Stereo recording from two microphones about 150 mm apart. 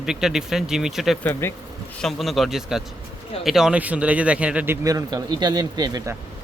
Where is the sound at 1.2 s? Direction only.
15° left (ahead or behind).